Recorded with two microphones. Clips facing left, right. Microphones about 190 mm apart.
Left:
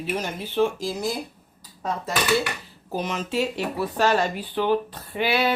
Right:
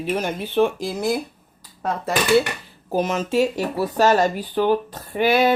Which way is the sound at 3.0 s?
45° right (ahead or behind).